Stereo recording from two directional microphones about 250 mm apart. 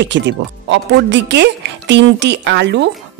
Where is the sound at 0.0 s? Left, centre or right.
Right.